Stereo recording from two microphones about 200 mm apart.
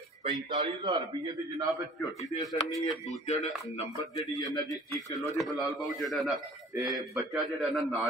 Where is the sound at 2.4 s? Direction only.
15° left (ahead or behind).